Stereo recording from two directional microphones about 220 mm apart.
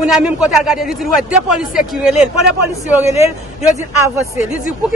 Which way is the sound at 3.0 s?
30° left (ahead or behind).